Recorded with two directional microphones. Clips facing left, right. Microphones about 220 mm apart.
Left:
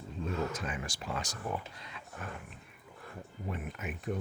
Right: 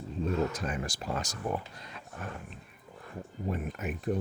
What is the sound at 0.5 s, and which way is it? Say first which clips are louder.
Speech: right 4 dB; 40° right (ahead or behind).